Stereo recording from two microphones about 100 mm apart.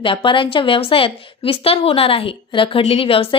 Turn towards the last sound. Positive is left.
turn(degrees=65)  # may be behind; listen again after turning